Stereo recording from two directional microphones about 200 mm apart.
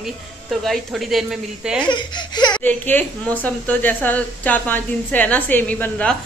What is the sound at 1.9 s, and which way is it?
Speech, 20° left (ahead or behind).